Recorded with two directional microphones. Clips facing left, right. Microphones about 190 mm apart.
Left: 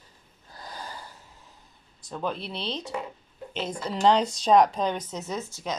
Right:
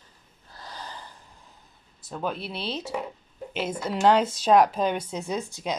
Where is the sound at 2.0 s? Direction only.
5° right (ahead or behind).